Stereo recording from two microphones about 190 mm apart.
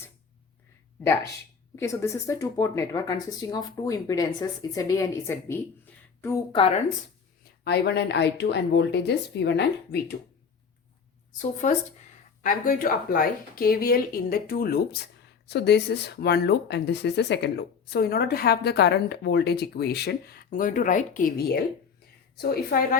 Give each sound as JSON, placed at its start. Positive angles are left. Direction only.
{"t": 1.7, "sound": "speech", "side_deg": 15}
{"t": 6.5, "sound": "a woman's voice", "side_deg": 30}
{"t": 7.6, "sound": "speech", "side_deg": 60}
{"t": 11.3, "sound": "speech", "side_deg": 40}
{"t": 15.4, "sound": "speech", "side_deg": 60}